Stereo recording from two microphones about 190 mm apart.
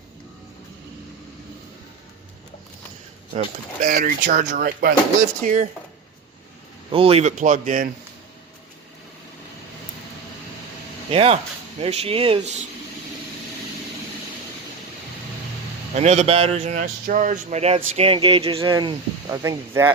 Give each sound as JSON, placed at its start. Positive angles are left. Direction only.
{"t": 3.3, "sound": "speech", "side_deg": -40}
{"t": 6.9, "sound": "speech", "side_deg": -30}
{"t": 11.1, "sound": "speech", "side_deg": -30}
{"t": 16.0, "sound": "speech", "side_deg": -35}